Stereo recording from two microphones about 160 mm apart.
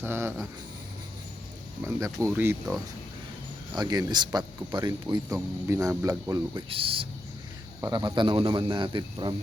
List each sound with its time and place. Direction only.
0.0 s speech: 15° right (ahead or behind)
1.8 s speech: 15° right (ahead or behind)
3.8 s speech: 25° right (ahead or behind)
6.7 s speech: 35° right (ahead or behind)
7.8 s speech: 25° right (ahead or behind)